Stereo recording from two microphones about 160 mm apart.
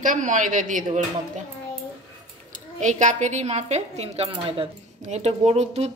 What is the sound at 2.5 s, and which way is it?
Speech, 50° right (ahead or behind).